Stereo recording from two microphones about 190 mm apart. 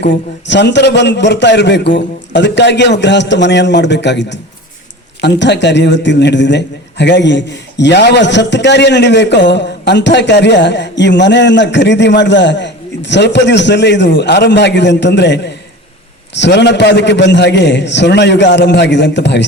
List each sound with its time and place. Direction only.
0.0 s a man's voice: 65° left (ahead or behind)